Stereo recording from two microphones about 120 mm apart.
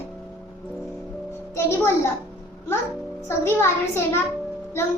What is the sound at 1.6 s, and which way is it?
Child singing, 25° left (ahead or behind).